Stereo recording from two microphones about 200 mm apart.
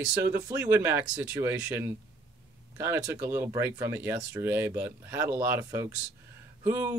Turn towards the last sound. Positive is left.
turn(degrees=-15)  # may be behind; listen again after turning